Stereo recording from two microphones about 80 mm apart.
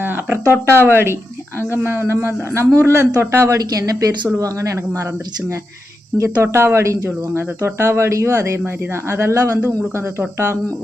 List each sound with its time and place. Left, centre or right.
0.0 s a sound: right
0.9 s speech: right
6.1 s speech: right